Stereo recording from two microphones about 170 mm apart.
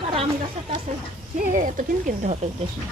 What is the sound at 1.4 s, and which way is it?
Speech, 50° right (ahead or behind).